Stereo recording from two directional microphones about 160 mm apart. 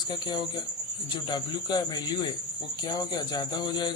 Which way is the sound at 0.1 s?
25° left (ahead or behind).